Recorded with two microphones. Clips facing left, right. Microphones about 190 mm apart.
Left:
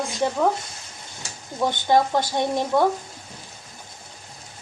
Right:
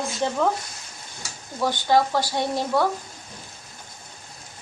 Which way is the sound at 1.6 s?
20° left (ahead or behind).